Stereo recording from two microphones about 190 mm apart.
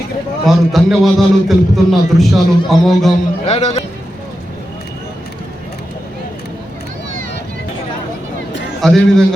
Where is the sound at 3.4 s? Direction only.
35° left (ahead or behind).